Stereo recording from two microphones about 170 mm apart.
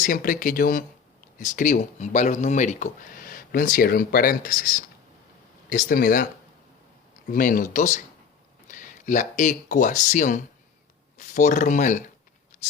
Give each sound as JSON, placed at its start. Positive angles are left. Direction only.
{"t": 0.0, "sound": "speech", "side_deg": 55}
{"t": 7.3, "sound": "speech", "side_deg": 55}